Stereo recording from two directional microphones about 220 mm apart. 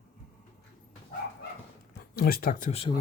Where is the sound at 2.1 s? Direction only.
40° left (ahead or behind).